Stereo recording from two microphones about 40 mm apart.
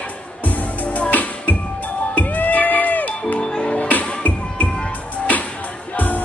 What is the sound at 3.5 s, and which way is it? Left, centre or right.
Music, left.